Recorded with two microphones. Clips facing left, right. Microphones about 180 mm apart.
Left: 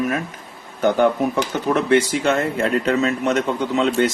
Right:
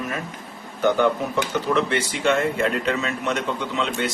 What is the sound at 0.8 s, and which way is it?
A man's voice, 45° left (ahead or behind).